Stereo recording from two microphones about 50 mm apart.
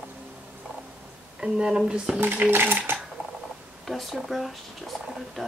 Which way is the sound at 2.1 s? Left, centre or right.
Right.